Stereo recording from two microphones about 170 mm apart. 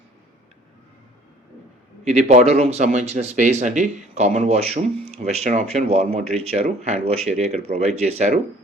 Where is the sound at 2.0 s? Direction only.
40° right (ahead or behind).